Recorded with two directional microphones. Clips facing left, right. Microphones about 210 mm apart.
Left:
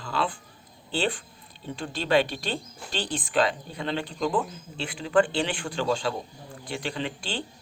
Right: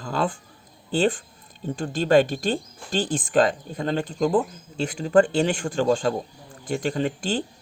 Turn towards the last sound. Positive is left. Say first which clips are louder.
# right 7 dB
turn(degrees=-45)  # may be behind; listen again after turning